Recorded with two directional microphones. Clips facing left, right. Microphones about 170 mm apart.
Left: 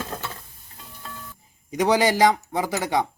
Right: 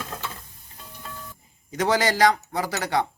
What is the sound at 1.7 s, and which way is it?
Speech, 15° left (ahead or behind).